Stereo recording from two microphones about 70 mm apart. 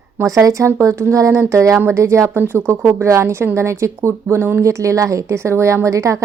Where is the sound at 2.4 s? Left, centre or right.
Right.